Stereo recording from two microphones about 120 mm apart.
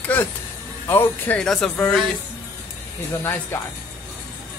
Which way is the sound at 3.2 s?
20° left (ahead or behind).